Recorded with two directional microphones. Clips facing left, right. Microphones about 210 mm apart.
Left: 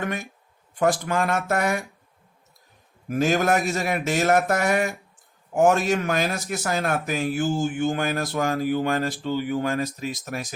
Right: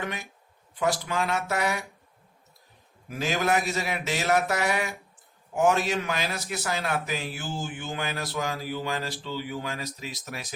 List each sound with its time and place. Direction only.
0.0 s a man's voice: 50° left (ahead or behind)
3.1 s a man's voice: 50° left (ahead or behind)